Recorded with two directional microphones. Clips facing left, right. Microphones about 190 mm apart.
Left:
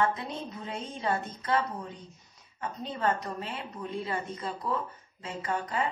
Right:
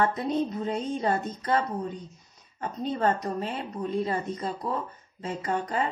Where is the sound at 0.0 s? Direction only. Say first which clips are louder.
Right 5 dB; 45° right (ahead or behind).